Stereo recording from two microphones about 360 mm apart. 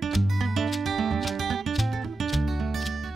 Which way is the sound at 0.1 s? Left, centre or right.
Centre.